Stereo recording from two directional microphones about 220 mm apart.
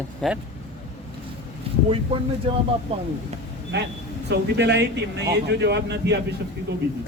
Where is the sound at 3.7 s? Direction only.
50° right (ahead or behind).